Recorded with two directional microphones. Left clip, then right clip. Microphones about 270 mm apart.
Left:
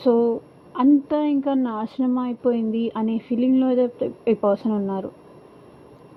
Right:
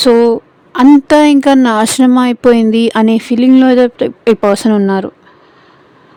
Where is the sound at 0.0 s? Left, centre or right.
Right.